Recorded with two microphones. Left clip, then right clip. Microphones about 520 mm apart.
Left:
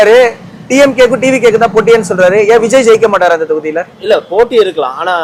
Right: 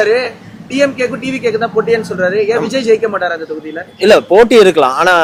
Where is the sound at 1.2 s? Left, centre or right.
Centre.